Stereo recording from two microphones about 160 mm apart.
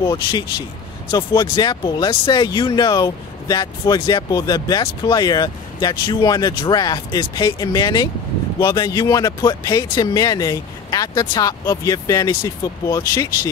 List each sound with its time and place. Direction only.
0.0 s speech: 25° left (ahead or behind)